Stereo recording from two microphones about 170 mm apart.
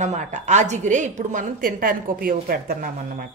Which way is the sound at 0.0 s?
45° right (ahead or behind).